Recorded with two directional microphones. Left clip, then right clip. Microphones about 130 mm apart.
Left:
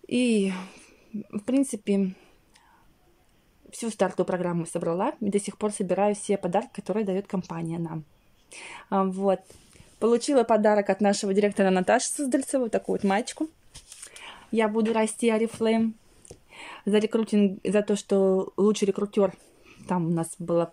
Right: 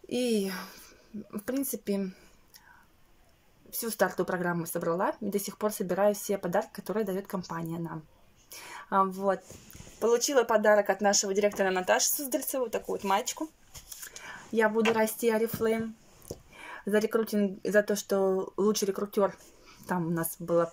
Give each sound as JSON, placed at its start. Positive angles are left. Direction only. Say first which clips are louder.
{"t": 0.0, "sound": "speech", "louder": "left 4 dB", "side_deg": 15}
{"t": 3.7, "sound": "speech", "louder": "left 2 dB", "side_deg": 20}
{"t": 9.9, "sound": "speech", "louder": "left 3 dB", "side_deg": 30}
{"t": 14.2, "sound": "speech", "louder": "left 1 dB", "side_deg": 20}